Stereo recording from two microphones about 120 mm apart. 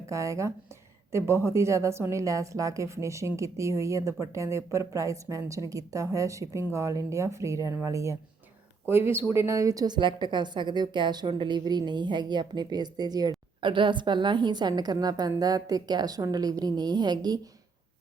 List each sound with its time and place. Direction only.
0.1 s a woman's voice: 25° right (ahead or behind)